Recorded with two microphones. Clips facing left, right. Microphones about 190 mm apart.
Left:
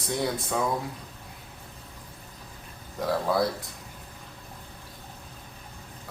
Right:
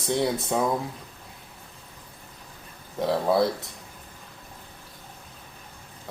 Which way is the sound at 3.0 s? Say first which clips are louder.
Right 3 dB; 25° right (ahead or behind).